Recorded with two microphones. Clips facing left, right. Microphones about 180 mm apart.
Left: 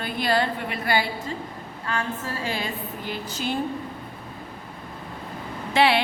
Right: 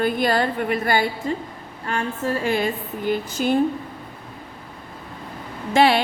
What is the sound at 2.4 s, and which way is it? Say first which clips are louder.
A woman's voice: right 7 dB; 50° right (ahead or behind).